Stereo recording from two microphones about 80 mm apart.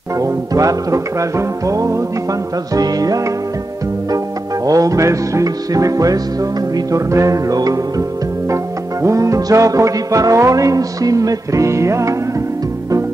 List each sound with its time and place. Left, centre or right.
0.2 s music: right
4.6 s music: right
9.0 s music: right